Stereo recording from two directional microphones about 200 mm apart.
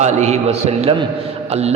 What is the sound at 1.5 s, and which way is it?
Music, 30° right (ahead or behind).